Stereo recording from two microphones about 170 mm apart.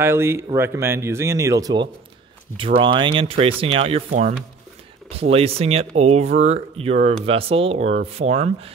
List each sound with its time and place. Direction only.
0.0 s speech: 15° right (ahead or behind); by 8.7 s 40° right (ahead or behind)